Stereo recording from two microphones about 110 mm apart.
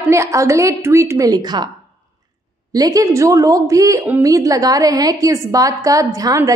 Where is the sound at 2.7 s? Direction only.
35° right (ahead or behind).